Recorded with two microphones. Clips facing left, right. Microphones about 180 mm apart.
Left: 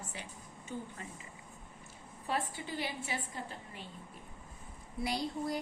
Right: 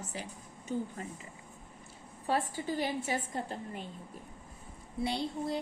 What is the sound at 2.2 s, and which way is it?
A woman's voice, 40° right (ahead or behind).